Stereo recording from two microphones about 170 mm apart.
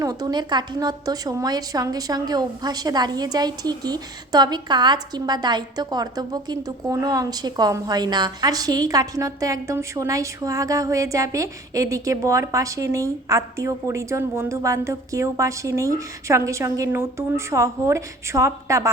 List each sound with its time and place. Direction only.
0.0 s a woman's voice: 25° right (ahead or behind)